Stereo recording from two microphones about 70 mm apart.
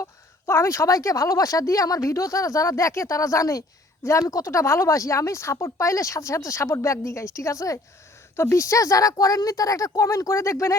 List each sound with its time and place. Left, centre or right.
0.0 s a woman's voice: left
8.4 s a woman's voice: left